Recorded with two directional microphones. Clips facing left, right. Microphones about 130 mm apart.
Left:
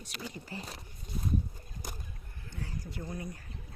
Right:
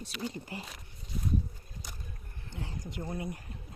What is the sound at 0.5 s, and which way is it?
Speech, 15° right (ahead or behind).